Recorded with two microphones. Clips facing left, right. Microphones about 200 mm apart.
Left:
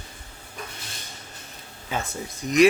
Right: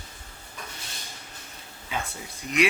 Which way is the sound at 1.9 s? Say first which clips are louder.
Left 4 dB; 40° left (ahead or behind).